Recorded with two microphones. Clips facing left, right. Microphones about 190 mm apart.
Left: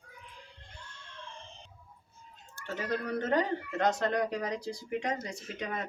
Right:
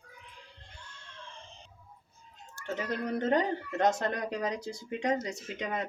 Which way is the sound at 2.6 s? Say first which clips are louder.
Right 4 dB; 60° left (ahead or behind).